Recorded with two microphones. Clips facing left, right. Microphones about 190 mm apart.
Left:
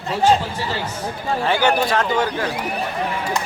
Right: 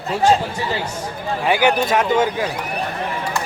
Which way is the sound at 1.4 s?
15° right (ahead or behind).